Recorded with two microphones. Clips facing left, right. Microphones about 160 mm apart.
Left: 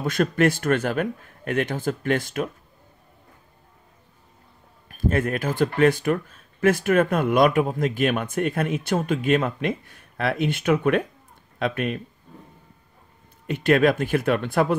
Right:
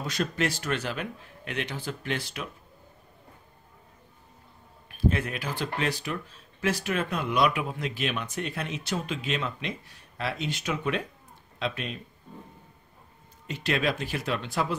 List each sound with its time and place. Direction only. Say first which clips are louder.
0.0 s speech: left 8 dB; 55° left (ahead or behind)
4.8 s speech: left 4 dB; 45° left (ahead or behind)
13.5 s speech: left 9 dB; 55° left (ahead or behind)